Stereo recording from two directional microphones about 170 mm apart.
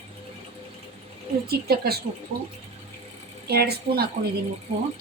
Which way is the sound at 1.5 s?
65° right (ahead or behind).